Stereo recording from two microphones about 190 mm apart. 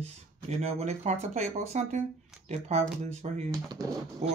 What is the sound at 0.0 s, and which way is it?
Speech, 35° right (ahead or behind).